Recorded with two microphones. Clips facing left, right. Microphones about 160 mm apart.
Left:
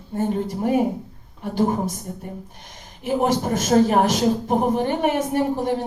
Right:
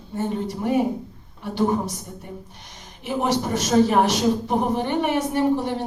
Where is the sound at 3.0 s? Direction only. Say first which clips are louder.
Left 3 dB; 45° left (ahead or behind).